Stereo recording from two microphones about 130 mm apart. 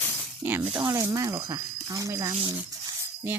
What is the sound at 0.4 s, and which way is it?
Speech, 15° right (ahead or behind).